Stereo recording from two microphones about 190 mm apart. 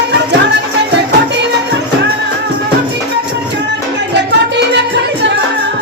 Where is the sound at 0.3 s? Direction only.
65° right (ahead or behind).